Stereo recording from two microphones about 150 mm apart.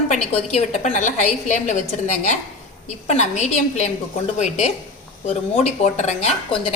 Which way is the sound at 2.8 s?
50° left (ahead or behind).